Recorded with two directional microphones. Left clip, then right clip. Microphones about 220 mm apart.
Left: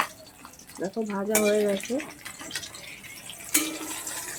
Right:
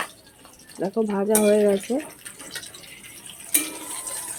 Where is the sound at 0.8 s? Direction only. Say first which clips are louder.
Right 6 dB; 35° right (ahead or behind).